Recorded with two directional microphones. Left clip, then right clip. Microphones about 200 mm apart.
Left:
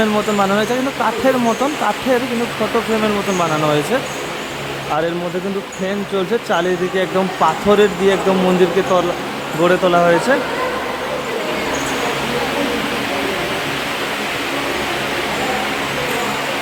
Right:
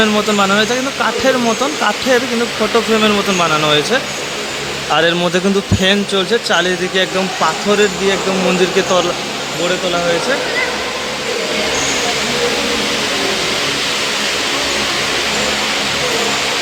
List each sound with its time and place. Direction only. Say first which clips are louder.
0.0 s speech: right 3 dB; 10° left (ahead or behind)
5.8 s speech: right 5 dB; 5° left (ahead or behind)